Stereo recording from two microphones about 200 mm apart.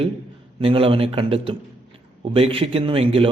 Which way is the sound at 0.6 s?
25° right (ahead or behind).